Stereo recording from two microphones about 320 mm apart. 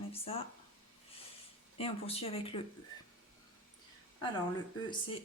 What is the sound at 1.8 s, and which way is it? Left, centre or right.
Speech, centre.